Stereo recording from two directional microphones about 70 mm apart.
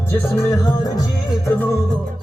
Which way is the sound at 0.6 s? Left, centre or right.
Left.